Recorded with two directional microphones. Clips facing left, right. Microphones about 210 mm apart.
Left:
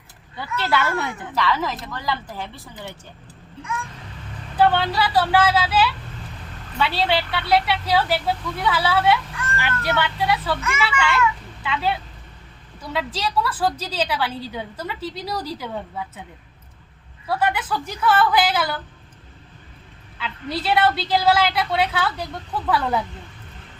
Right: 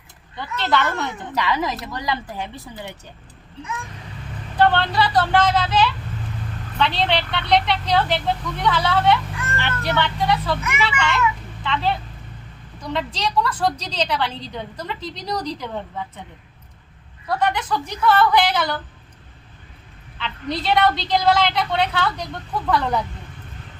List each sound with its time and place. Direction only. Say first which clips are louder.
0.3 s speech: right 1 dB; 10° left (ahead or behind)
1.4 s a woman's voice: even; 15° right (ahead or behind)
4.5 s a woman's voice: right 1 dB; 5° left (ahead or behind)
17.2 s speech: right 1 dB; 5° left (ahead or behind)
20.1 s a woman's voice: right 1 dB; 5° left (ahead or behind)